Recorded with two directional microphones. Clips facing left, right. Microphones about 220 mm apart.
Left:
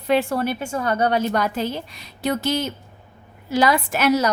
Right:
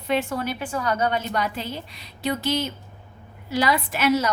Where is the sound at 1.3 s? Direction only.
45° left (ahead or behind).